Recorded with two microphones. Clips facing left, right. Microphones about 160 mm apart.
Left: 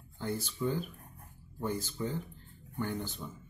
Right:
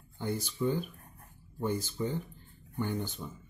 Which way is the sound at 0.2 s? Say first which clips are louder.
Right 2 dB; 15° right (ahead or behind).